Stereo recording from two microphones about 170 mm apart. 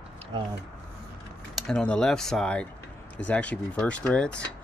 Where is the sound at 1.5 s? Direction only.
5° left (ahead or behind).